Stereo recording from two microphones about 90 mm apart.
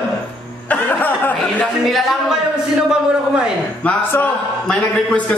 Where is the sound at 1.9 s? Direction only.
Centre (ahead or behind).